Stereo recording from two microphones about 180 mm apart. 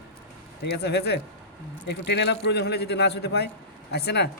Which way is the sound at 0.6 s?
65° left (ahead or behind).